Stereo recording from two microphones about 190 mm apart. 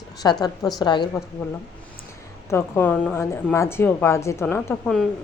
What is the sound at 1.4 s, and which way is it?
A woman's voice, 5° left (ahead or behind).